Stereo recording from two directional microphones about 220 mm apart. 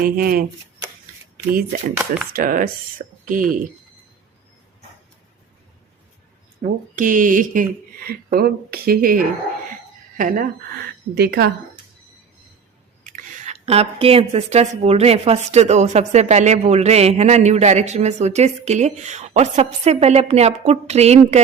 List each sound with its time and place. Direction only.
0.0 s a woman's voice: 40° right (ahead or behind)
2.3 s a woman's voice: 40° right (ahead or behind)
6.6 s a woman's voice: 40° right (ahead or behind)
13.1 s a woman's voice: 35° right (ahead or behind)